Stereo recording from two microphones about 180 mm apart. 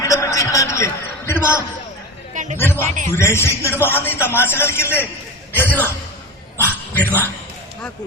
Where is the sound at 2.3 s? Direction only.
45° right (ahead or behind).